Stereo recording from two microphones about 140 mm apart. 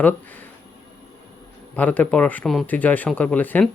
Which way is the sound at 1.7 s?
10° left (ahead or behind).